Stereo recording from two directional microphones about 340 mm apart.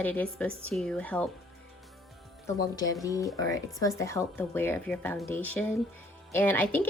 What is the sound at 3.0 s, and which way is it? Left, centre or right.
A woman's voice, centre.